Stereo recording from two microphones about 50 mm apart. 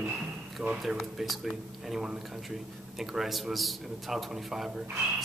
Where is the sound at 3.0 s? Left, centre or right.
Centre.